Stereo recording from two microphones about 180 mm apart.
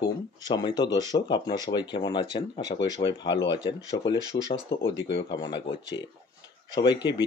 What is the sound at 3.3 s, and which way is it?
Speech, 85° left.